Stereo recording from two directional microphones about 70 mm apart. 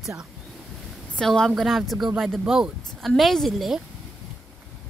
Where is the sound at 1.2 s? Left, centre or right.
Centre.